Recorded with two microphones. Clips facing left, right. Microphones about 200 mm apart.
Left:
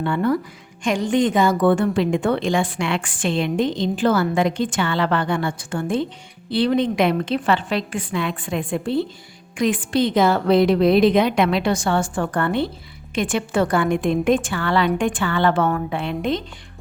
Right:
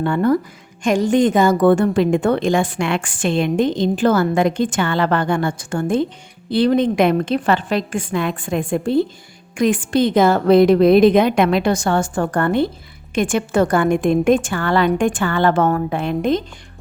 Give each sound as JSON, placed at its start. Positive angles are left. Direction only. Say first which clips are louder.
{"t": 0.0, "sound": "a woman's voice", "louder": "right 4 dB", "side_deg": -45}